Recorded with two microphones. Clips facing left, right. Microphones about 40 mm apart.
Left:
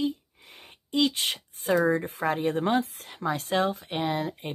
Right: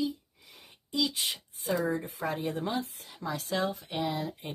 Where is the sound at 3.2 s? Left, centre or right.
Left.